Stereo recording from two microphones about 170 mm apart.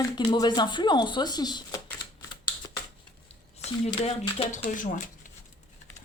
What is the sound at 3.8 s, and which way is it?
Speech, 40° left (ahead or behind).